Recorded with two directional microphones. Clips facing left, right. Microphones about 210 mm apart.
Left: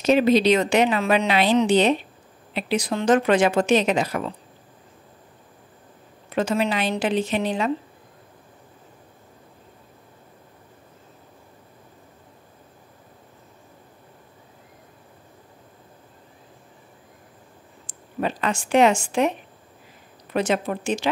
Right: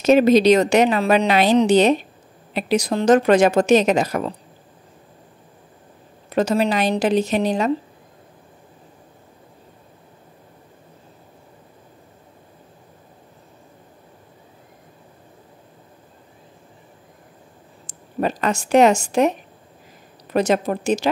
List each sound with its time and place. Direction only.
0.0 s a woman's voice: 45° right (ahead or behind)
6.3 s a woman's voice: 40° right (ahead or behind)
17.8 s speech: 40° right (ahead or behind)
20.3 s a woman's voice: 40° right (ahead or behind)